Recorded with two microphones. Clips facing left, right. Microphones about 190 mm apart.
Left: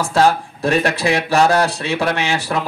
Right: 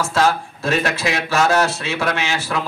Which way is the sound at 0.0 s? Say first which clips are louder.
Left 3 dB; 35° left (ahead or behind).